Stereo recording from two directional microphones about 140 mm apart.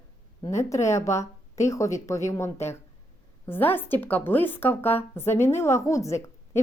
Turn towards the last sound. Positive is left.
turn(degrees=20)  # may be behind; listen again after turning